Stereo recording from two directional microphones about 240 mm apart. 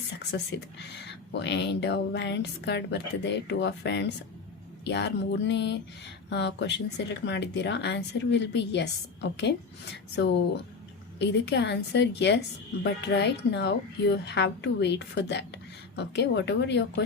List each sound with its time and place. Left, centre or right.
0.3 s a woman's voice: left